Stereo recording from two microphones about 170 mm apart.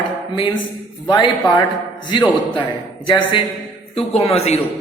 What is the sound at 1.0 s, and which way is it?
A man's voice, 25° left (ahead or behind).